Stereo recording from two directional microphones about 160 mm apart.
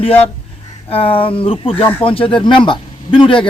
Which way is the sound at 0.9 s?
35° left (ahead or behind).